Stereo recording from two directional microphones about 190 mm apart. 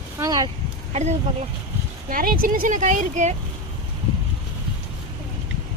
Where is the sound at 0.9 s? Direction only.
35° right (ahead or behind).